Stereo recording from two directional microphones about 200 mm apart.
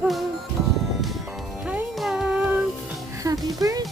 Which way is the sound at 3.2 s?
15° right (ahead or behind).